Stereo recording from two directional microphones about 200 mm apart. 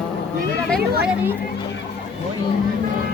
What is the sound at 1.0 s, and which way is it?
Speech, 10° right (ahead or behind).